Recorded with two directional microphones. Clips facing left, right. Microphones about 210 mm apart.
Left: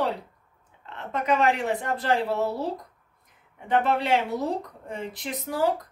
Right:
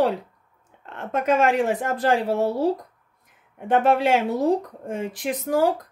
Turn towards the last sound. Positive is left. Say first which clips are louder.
# right 8 dB
turn(degrees=-45)  # may be behind; listen again after turning